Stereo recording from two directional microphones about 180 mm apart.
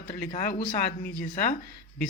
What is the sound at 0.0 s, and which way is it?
Speech, 50° left (ahead or behind).